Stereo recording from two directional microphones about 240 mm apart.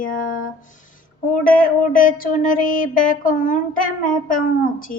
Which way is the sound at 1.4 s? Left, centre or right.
Left.